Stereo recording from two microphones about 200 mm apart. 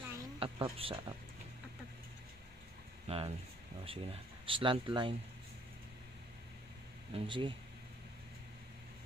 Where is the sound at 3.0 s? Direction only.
30° right (ahead or behind).